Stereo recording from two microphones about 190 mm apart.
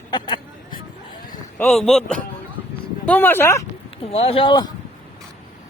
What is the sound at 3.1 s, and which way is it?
Speech, 10° left (ahead or behind).